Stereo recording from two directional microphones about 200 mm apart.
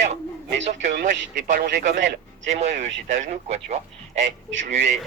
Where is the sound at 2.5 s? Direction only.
35° right (ahead or behind).